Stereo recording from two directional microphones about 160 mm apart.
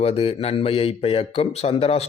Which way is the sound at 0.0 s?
35° left (ahead or behind).